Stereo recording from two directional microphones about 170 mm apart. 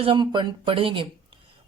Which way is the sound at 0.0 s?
30° right (ahead or behind).